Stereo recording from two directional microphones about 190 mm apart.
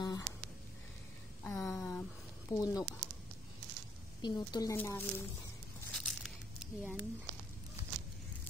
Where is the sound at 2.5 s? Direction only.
15° left (ahead or behind).